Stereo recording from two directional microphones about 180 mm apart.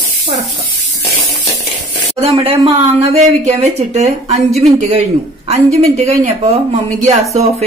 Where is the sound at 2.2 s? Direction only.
30° right (ahead or behind).